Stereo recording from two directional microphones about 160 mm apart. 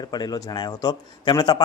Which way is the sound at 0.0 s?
25° left (ahead or behind).